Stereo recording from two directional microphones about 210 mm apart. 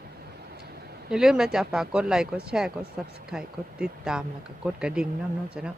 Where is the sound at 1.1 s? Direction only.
5° right (ahead or behind).